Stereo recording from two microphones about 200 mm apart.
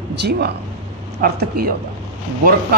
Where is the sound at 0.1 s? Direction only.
55° right (ahead or behind).